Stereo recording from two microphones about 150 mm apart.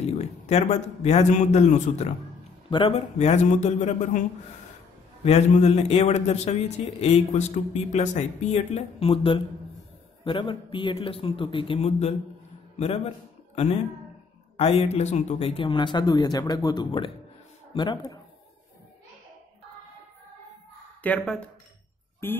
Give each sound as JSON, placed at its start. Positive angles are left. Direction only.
{"t": 0.0, "sound": "a man's voice", "side_deg": 45}
{"t": 5.2, "sound": "a man's voice", "side_deg": 45}
{"t": 14.6, "sound": "a man's voice", "side_deg": 45}
{"t": 21.0, "sound": "speech", "side_deg": 10}